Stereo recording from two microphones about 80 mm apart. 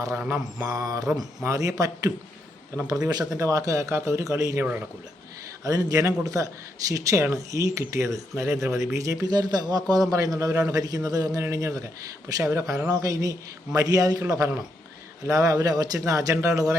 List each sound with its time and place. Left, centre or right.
0.6 s a man's voice: right
5.6 s a man's voice: right
9.2 s speech: right
9.9 s a man's voice: right
11.3 s a man's voice: right